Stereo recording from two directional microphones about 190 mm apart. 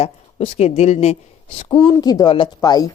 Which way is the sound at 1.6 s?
15° left (ahead or behind).